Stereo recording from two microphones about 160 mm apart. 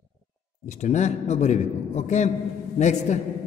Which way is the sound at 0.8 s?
45° left (ahead or behind).